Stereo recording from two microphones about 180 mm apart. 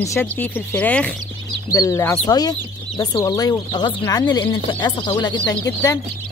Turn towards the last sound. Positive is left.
turn(degrees=15)  # may be behind; listen again after turning